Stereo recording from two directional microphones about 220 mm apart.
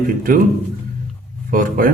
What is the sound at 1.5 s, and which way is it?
Speech, 40° right (ahead or behind).